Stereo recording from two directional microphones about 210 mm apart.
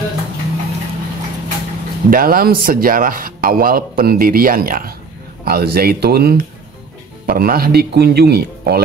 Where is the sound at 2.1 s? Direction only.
45° right (ahead or behind).